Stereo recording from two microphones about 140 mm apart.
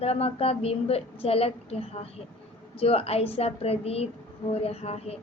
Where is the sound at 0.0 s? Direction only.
45° left (ahead or behind).